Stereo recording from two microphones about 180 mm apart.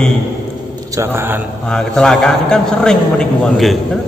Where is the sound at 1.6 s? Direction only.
5° left (ahead or behind).